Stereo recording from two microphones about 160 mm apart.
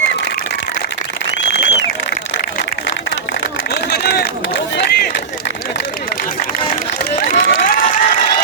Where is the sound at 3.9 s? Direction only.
75° left (ahead or behind).